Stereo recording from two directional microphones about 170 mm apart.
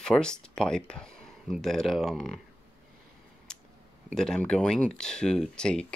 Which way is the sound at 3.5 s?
5° left (ahead or behind).